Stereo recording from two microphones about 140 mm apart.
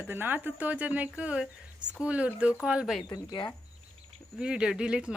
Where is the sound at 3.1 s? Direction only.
30° left (ahead or behind).